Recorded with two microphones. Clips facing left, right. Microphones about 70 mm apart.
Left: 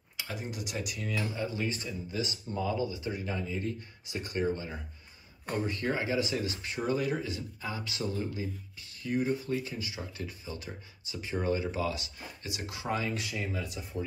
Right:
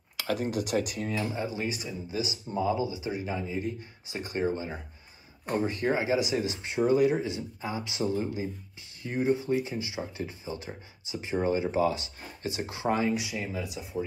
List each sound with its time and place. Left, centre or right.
0.2 s speech: right
1.3 s speech: right
13.1 s speech: centre